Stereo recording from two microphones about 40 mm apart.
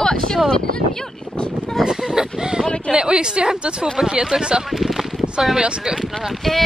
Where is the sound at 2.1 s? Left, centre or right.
Centre.